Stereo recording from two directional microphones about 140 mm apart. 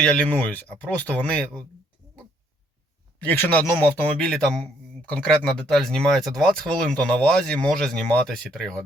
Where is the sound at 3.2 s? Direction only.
10° left (ahead or behind).